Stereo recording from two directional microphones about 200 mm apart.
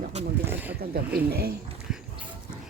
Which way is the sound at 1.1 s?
50° right (ahead or behind).